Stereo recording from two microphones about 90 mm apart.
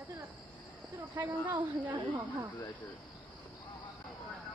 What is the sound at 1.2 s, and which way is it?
Speech, 20° right (ahead or behind).